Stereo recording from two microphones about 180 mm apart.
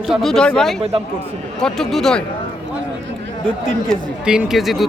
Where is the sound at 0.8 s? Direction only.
30° right (ahead or behind).